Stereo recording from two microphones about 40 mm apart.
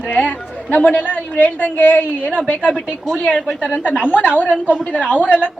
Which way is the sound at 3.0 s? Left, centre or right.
Left.